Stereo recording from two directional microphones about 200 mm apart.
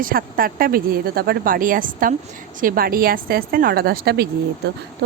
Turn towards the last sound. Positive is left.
turn(degrees=-55)  # may be behind; listen again after turning